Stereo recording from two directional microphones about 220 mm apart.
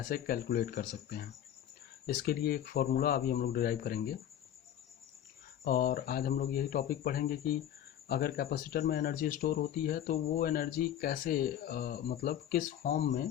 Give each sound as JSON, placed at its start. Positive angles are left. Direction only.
{"t": 0.0, "sound": "speech", "side_deg": 40}
{"t": 5.6, "sound": "speech", "side_deg": 40}